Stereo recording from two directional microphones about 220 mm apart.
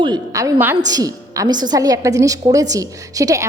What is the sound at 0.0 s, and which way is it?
A woman's voice, 15° right (ahead or behind).